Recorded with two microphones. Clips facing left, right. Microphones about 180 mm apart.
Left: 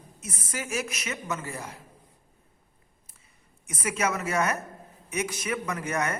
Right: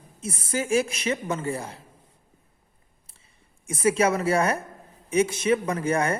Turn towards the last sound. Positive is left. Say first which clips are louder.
# right 5 dB
turn(degrees=-30)  # may be behind; listen again after turning